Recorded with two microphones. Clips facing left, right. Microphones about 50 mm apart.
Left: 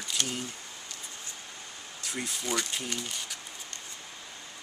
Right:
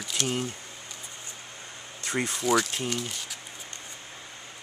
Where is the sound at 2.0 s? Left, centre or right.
Right.